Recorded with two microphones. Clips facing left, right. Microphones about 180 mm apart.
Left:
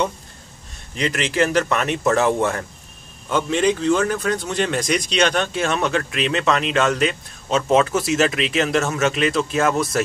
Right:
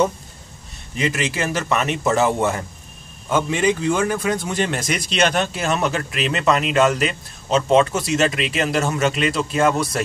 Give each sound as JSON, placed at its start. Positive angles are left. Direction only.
{"t": 0.9, "sound": "a man's voice", "side_deg": -5}